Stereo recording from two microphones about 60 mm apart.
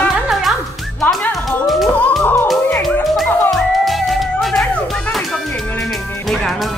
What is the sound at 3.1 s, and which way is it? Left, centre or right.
Music, centre.